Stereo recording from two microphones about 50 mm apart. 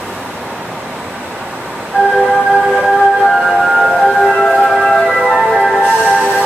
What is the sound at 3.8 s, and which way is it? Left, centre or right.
Music, centre.